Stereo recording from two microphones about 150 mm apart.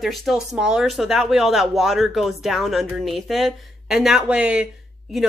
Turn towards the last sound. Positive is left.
turn(degrees=-5)  # may be behind; listen again after turning